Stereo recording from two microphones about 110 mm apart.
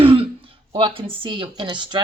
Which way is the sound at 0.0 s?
60° right (ahead or behind).